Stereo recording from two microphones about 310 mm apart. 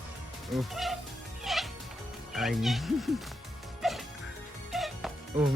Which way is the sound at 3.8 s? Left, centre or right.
Centre.